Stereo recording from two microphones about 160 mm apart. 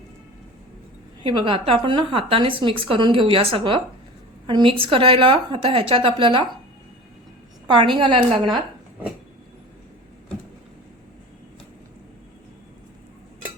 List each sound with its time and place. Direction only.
1.2 s a woman's voice: 35° right (ahead or behind)
7.7 s a woman's voice: 30° right (ahead or behind)